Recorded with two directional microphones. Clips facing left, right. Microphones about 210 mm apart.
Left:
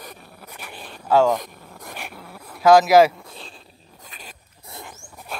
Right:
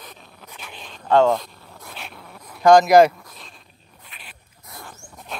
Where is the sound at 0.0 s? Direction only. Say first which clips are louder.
Left 3 dB; 10° left (ahead or behind).